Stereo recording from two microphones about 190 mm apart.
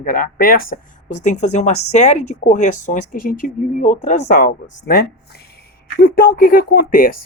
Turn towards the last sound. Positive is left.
turn(degrees=50)  # may be behind; listen again after turning